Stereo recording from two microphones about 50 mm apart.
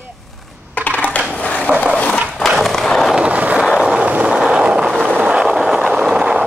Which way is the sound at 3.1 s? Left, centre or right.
Right.